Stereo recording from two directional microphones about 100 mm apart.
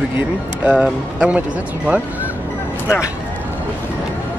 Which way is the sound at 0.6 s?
10° right (ahead or behind).